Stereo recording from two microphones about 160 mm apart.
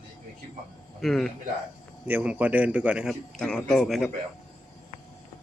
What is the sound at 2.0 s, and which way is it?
A man's voice, 10° right (ahead or behind).